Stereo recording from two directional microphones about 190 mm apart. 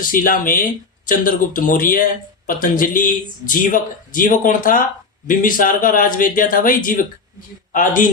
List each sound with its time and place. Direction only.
0.0 s a man's voice: 45° left (ahead or behind)